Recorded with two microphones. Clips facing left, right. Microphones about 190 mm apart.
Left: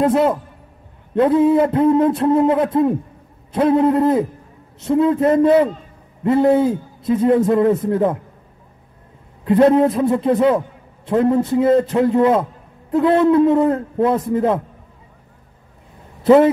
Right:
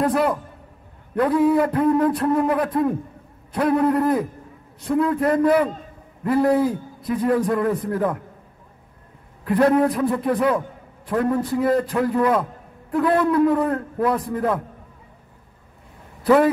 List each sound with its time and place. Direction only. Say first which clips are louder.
0.0 s a man's voice: left 4 dB; 25° left (ahead or behind)
9.4 s a man's voice: left 5 dB; 25° left (ahead or behind)
16.2 s a man's voice: left 5 dB; 25° left (ahead or behind)